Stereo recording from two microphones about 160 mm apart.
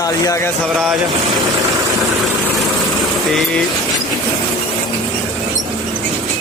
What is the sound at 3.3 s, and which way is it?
Speech, centre (ahead or behind).